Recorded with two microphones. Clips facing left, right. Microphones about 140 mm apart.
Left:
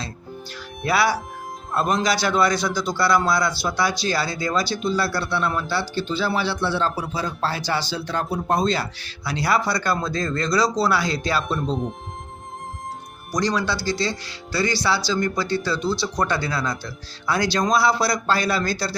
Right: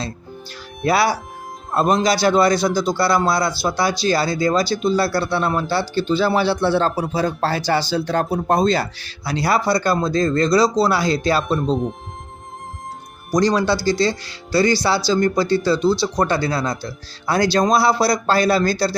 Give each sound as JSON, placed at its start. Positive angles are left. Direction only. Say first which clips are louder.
{"t": 0.9, "sound": "speech", "louder": "right 3 dB", "side_deg": -35}
{"t": 13.3, "sound": "speech", "louder": "right 6 dB", "side_deg": -40}